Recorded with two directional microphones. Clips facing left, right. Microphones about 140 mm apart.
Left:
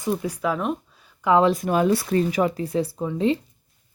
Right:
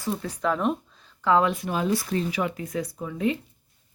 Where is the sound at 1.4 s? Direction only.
40° left (ahead or behind).